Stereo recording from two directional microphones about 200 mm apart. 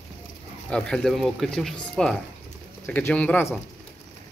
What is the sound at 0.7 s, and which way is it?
Speech, 5° left (ahead or behind).